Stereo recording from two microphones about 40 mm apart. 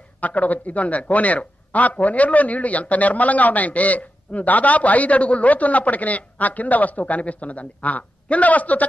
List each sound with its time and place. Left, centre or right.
0.2 s a man's voice: left